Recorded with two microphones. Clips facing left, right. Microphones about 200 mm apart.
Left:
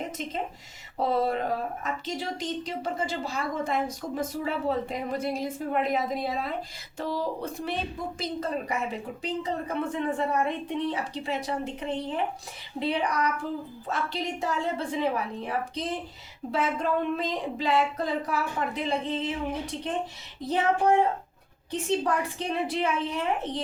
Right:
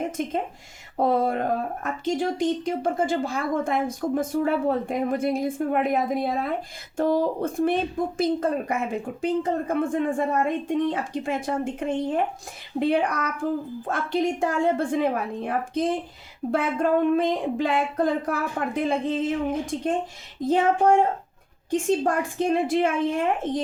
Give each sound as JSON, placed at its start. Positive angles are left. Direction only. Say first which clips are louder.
{"t": 0.0, "sound": "speech", "louder": "right 6 dB", "side_deg": -50}